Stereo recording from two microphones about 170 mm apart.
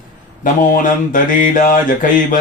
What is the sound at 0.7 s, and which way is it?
Mantra, 50° left (ahead or behind).